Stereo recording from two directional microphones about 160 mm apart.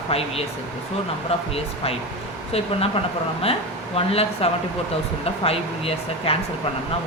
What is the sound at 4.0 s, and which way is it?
Speech, 35° left (ahead or behind).